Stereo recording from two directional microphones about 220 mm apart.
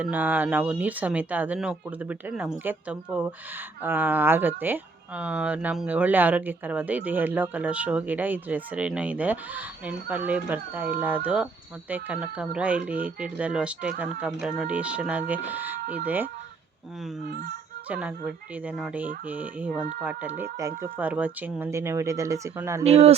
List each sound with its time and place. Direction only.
0.0 s speech: 10° right (ahead or behind)
17.2 s speech: 45° right (ahead or behind)
17.8 s speech: 5° right (ahead or behind)
22.8 s speech: 30° right (ahead or behind)